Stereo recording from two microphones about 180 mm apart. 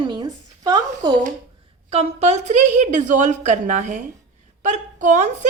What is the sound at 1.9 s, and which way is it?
A woman's voice, 35° right (ahead or behind).